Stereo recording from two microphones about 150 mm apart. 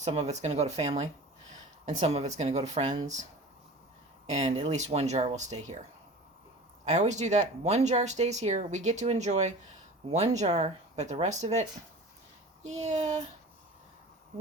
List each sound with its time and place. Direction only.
0.0 s speech: 45° right (ahead or behind)
4.3 s speech: 50° right (ahead or behind)
6.8 s speech: 50° right (ahead or behind)
12.6 s speech: 50° right (ahead or behind)